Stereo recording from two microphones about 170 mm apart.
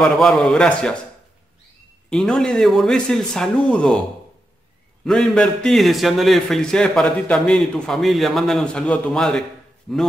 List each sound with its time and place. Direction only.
0.0 s a man's voice: 5° left (ahead or behind)
2.0 s a man's voice: 5° left (ahead or behind)
5.0 s a man's voice: 5° left (ahead or behind)